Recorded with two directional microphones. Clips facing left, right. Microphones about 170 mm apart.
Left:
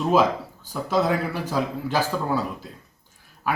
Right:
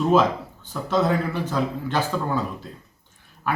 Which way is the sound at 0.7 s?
5° left (ahead or behind).